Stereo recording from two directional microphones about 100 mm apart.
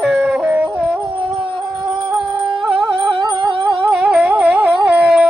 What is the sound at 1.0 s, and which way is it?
Howl, 60° right (ahead or behind).